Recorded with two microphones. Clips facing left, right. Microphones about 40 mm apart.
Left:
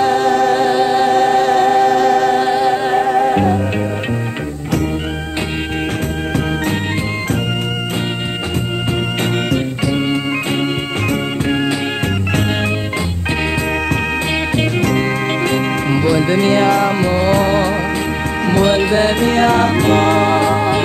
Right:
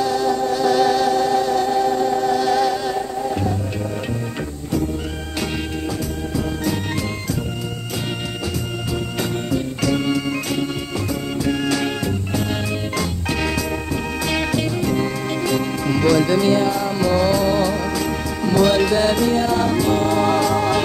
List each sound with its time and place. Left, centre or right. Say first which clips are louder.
0.0 s music: left 6 dB; left
0.7 s music: left 3 dB; left
1.0 s music: left 5 dB; left
2.5 s music: left 5 dB; left
3.0 s music: left 10 dB; left
14.8 s music: left 6 dB; left
16.0 s music: even; centre
16.3 s music: left 4 dB; left
17.0 s music: left 3 dB; left
18.7 s music: left 3 dB; left
19.3 s music: left 5 dB; left
20.2 s music: left 3 dB; left